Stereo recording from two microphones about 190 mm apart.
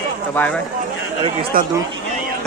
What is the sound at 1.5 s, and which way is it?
Speech, 50° right (ahead or behind).